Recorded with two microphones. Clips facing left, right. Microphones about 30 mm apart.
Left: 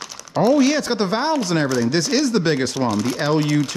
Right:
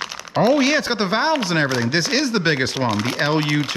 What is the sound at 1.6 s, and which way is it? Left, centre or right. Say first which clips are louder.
Speech: left 1 dB; right.